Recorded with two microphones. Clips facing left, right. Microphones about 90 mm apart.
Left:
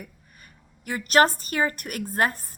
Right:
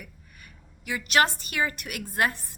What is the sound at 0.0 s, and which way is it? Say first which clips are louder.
A woman's voice: left 3 dB; 40° left (ahead or behind).